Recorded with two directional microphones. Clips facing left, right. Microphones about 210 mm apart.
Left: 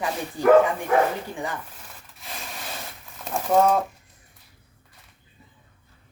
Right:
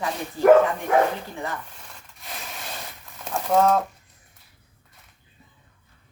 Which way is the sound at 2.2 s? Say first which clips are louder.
Even; centre (ahead or behind).